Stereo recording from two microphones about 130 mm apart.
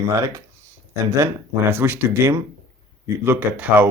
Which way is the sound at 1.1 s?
20° right (ahead or behind).